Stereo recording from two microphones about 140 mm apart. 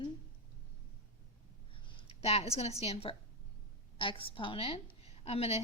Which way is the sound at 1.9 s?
45° left (ahead or behind).